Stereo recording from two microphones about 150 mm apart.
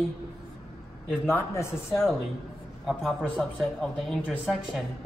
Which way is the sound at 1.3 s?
20° left (ahead or behind).